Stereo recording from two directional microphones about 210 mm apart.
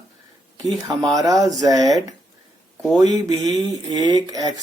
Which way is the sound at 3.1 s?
20° right (ahead or behind).